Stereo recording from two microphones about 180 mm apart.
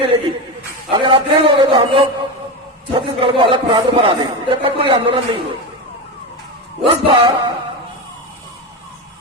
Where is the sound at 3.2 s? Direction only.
30° right (ahead or behind).